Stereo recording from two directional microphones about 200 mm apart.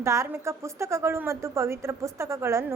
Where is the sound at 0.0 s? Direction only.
15° right (ahead or behind).